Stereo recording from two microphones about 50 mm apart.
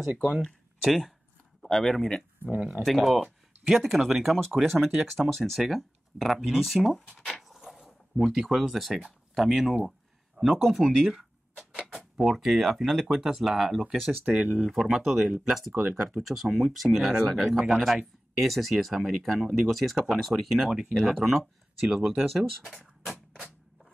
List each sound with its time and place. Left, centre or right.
0.2 s speech: centre
2.5 s speech: right
2.8 s speech: centre
7.3 s a sound: centre
10.4 s speech: centre
11.1 s a sound: centre
12.2 s speech: centre
14.2 s speech: right
14.7 s speech: centre
22.3 s speech: centre
22.8 s beatboxing: centre